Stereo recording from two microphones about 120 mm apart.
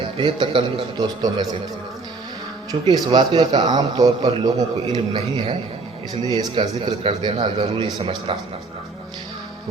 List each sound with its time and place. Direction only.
0.2 s a man's voice: 40° right (ahead or behind)
2.7 s a man's voice: 40° right (ahead or behind)
6.2 s a man's voice: 35° right (ahead or behind)